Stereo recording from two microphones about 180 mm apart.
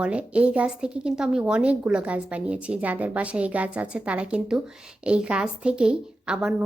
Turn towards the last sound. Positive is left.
turn(degrees=-5)  # may be behind; listen again after turning